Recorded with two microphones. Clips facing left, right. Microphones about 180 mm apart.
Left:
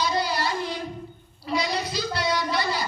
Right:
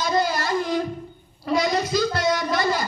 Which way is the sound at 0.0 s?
45° right (ahead or behind).